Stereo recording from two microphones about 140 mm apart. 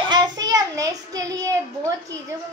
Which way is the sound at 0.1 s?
30° right (ahead or behind).